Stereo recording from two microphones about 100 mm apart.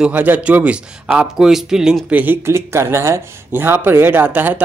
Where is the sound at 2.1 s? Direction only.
15° right (ahead or behind).